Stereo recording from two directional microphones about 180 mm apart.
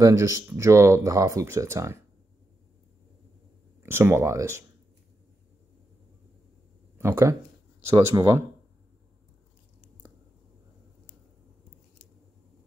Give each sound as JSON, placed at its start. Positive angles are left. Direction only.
{"t": 0.0, "sound": "speech", "side_deg": -15}
{"t": 3.8, "sound": "speech", "side_deg": -15}
{"t": 7.0, "sound": "speech", "side_deg": -15}